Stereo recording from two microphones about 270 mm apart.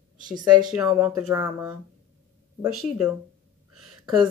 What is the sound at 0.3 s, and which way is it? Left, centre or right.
Speech, centre.